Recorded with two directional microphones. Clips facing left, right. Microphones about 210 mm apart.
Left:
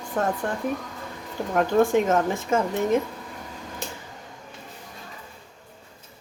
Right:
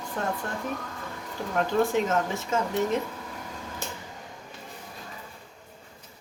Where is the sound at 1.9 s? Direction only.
50° left (ahead or behind).